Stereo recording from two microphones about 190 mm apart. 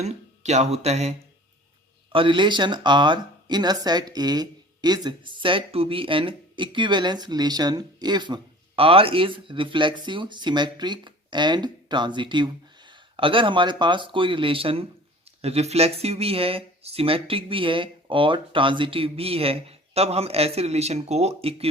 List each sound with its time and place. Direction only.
0.0 s speech: 35° right (ahead or behind)
2.1 s speech: 25° right (ahead or behind)